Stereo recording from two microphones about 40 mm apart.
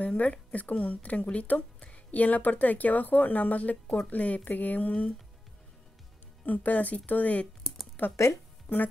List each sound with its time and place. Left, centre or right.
0.0 s a woman's voice: left
6.4 s speech: left